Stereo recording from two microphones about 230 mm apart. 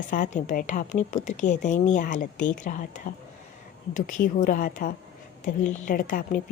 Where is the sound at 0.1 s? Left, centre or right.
Left.